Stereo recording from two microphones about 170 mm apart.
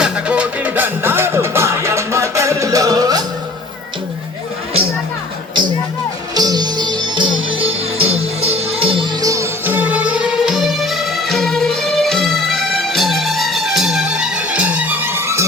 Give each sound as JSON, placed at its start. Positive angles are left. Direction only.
{"t": 0.0, "sound": "music", "side_deg": -5}
{"t": 6.3, "sound": "music", "side_deg": -25}
{"t": 9.2, "sound": "music", "side_deg": -20}